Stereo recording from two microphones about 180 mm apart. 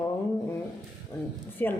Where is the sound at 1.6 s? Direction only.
10° left (ahead or behind).